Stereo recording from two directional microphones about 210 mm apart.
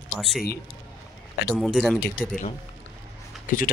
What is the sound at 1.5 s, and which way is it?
Speech, centre (ahead or behind).